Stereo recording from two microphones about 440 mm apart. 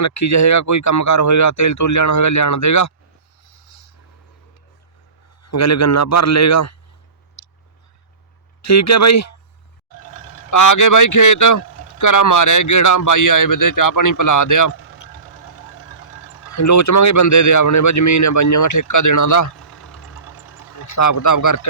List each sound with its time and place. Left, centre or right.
0.0 s speech: left
5.4 s speech: left
7.4 s a sound: left
8.6 s speech: left
14.7 s vehicle: left
14.9 s speech: left
19.9 s vehicle: left